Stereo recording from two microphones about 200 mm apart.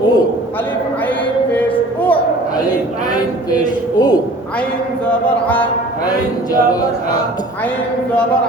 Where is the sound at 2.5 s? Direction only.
20° left (ahead or behind).